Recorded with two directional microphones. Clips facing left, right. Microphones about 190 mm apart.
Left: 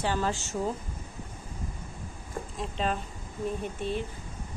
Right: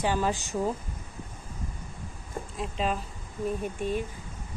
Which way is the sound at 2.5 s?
5° right (ahead or behind).